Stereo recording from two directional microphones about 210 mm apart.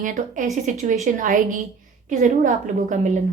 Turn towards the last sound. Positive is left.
turn(degrees=-35)  # may be behind; listen again after turning